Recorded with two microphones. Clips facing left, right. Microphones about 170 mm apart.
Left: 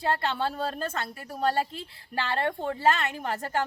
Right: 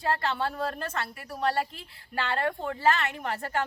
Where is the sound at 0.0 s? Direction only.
30° left (ahead or behind).